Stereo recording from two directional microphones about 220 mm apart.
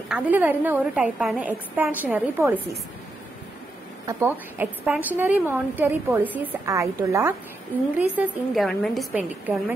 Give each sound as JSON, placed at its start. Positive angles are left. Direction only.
{"t": 0.1, "sound": "a woman's voice", "side_deg": -10}
{"t": 4.0, "sound": "a woman's voice", "side_deg": -10}
{"t": 8.2, "sound": "a woman's voice", "side_deg": 0}